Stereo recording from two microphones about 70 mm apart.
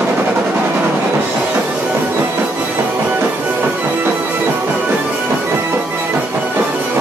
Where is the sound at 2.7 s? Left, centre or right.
Right.